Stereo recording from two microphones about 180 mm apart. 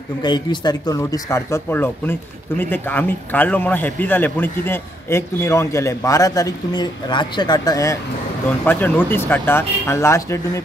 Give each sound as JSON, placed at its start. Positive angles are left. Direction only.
{"t": 0.2, "sound": "speech", "side_deg": 25}